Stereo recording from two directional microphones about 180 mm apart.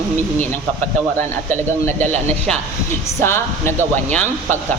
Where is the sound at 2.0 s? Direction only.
10° left (ahead or behind).